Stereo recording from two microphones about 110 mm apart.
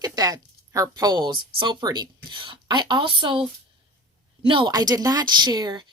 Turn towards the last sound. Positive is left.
turn(degrees=-40)  # may be behind; listen again after turning